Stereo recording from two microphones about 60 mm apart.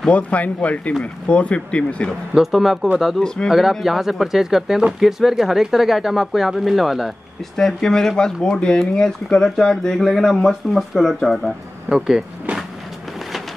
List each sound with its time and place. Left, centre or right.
0.1 s speech: left
2.3 s speech: centre
3.2 s speech: centre
3.4 s speech: centre
7.5 s speech: centre